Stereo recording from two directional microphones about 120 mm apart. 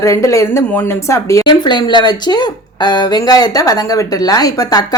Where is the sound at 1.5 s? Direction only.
40° left (ahead or behind).